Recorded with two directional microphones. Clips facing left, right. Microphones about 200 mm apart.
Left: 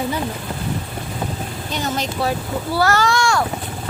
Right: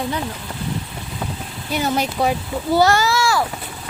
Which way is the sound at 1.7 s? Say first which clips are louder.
Right 4 dB; 10° right (ahead or behind).